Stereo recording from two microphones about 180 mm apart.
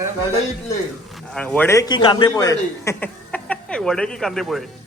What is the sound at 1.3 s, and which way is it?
A man's voice, 5° left (ahead or behind).